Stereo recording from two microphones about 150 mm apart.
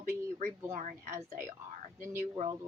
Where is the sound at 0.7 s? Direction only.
55° right (ahead or behind).